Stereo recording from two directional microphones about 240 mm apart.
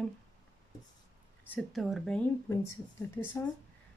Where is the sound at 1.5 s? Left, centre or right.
Centre.